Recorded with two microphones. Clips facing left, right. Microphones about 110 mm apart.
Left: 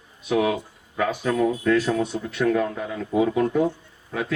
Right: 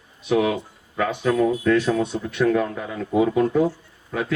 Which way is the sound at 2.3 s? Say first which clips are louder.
Right 2 dB; 25° right (ahead or behind).